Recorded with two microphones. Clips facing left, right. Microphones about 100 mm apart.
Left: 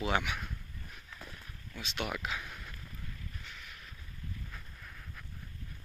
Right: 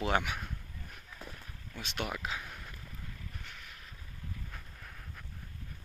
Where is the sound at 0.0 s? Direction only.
50° right (ahead or behind).